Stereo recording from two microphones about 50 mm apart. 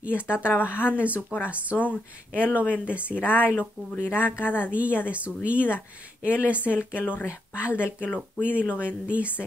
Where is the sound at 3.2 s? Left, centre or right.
Left.